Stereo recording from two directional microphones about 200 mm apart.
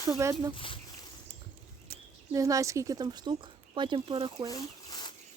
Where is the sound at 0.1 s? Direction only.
15° right (ahead or behind).